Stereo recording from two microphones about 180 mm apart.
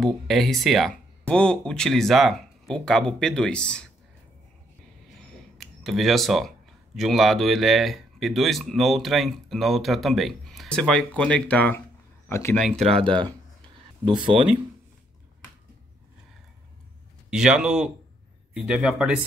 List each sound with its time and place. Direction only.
0.0 s speech: centre (ahead or behind)
5.6 s speech: centre (ahead or behind)
12.9 s speech: 30° right (ahead or behind)
17.3 s speech: 5° right (ahead or behind)